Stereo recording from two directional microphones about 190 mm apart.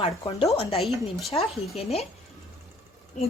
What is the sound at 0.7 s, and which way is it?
Speech, centre (ahead or behind).